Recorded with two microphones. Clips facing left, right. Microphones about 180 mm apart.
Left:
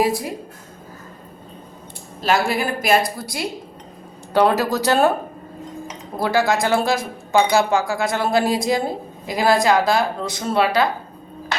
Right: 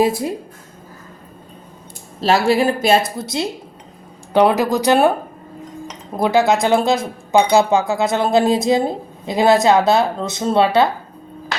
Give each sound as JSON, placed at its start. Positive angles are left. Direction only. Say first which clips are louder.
{"t": 0.0, "sound": "speech", "louder": "right 3 dB", "side_deg": -25}
{"t": 2.2, "sound": "speech", "louder": "right 5 dB", "side_deg": -30}
{"t": 6.1, "sound": "speech", "louder": "right 4 dB", "side_deg": -20}